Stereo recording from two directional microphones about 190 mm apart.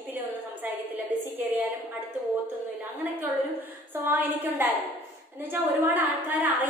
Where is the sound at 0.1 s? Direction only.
10° right (ahead or behind).